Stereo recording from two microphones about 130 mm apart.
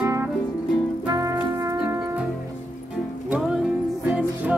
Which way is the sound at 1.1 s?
25° right (ahead or behind).